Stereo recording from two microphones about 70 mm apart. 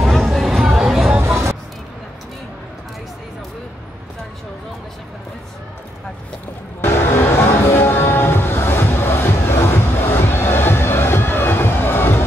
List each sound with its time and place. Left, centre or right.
0.0 s a sound: centre
1.2 s music: right
6.8 s music: left